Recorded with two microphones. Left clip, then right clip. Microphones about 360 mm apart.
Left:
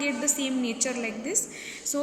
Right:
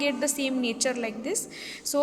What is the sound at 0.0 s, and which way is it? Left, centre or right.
A woman's voice, right.